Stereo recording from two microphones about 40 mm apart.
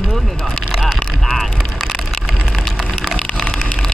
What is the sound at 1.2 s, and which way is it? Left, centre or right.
Vehicle, centre.